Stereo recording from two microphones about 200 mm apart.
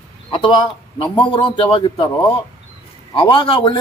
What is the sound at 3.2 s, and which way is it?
Speech, 25° left (ahead or behind).